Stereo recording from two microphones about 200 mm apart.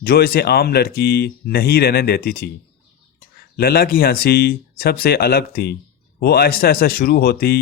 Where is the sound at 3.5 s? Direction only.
50° left (ahead or behind).